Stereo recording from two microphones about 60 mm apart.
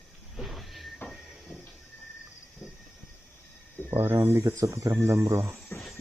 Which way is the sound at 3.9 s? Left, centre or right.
Right.